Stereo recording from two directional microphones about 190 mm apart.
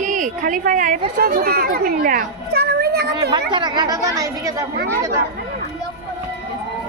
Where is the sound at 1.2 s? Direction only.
55° right (ahead or behind).